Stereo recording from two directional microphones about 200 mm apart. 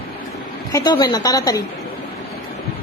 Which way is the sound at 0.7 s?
20° left (ahead or behind).